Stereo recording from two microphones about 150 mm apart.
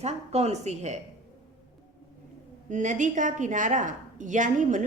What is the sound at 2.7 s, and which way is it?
A woman's voice, 55° right (ahead or behind).